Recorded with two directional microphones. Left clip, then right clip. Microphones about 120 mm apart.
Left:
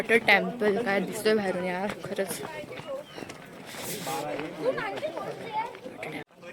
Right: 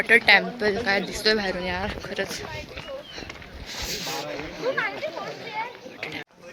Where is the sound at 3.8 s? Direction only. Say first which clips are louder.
Right 2 dB; 30° left (ahead or behind).